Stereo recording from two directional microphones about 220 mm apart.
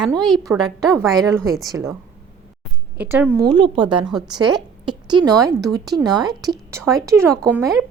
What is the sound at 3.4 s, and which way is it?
A woman's voice, 20° right (ahead or behind).